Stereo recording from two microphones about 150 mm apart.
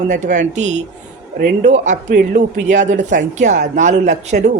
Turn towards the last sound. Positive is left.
turn(degrees=-50)  # may be behind; listen again after turning